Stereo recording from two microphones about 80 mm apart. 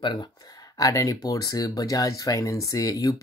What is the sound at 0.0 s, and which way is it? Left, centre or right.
Speech, left.